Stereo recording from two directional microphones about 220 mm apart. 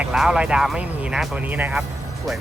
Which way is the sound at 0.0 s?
5° right (ahead or behind).